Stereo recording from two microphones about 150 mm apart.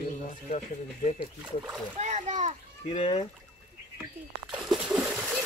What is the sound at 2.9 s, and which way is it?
Speech, 40° left (ahead or behind).